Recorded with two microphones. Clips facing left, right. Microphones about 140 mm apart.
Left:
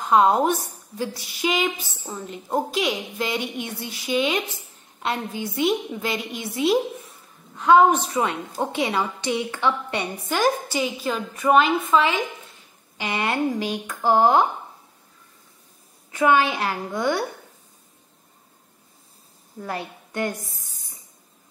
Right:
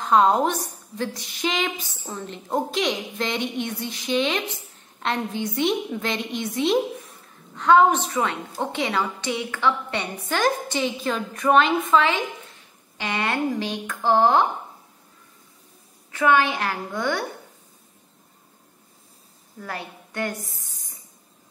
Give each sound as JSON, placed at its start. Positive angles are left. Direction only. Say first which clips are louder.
{"t": 0.0, "sound": "a woman's voice", "louder": "left 1 dB", "side_deg": 5}
{"t": 16.1, "sound": "a woman's voice", "louder": "left 1 dB", "side_deg": 15}
{"t": 19.6, "sound": "a woman's voice", "louder": "left 3 dB", "side_deg": 20}